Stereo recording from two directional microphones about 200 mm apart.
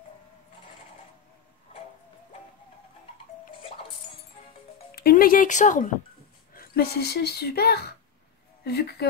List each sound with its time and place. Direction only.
4.9 s a woman's voice: 45° left (ahead or behind)